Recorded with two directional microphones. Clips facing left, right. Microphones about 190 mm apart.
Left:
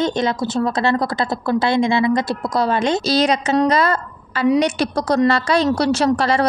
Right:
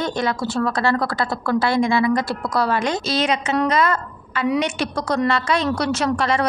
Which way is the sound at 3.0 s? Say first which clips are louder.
Left 4 dB; 35° left (ahead or behind).